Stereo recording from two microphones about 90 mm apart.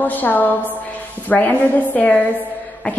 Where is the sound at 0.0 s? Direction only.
20° left (ahead or behind).